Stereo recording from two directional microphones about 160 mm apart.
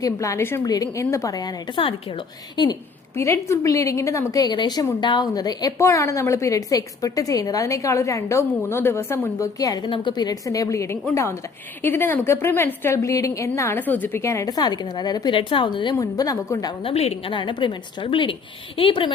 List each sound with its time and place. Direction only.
0.0 s a woman's voice: 20° left (ahead or behind)
3.2 s a woman's voice: 15° left (ahead or behind)
16.8 s a woman's voice: 40° left (ahead or behind)